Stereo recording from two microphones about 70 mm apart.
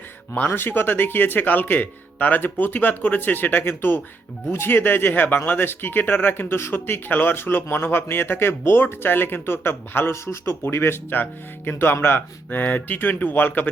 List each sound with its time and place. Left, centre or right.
0.3 s speech: left
10.1 s speech: left